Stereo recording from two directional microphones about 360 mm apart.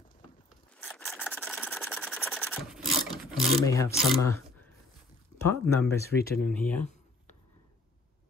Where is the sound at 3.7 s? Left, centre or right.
Centre.